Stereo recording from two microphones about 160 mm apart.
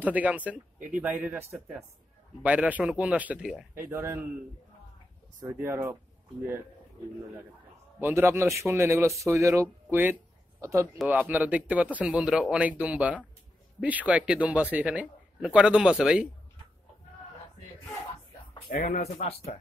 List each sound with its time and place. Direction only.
0.0 s a man's voice: 10° right (ahead or behind)
5.5 s a man's voice: 15° right (ahead or behind)
8.0 s a man's voice: 15° right (ahead or behind)
18.7 s speech: 55° left (ahead or behind)